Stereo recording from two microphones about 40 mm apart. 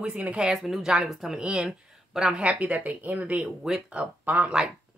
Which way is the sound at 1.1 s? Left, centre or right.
Centre.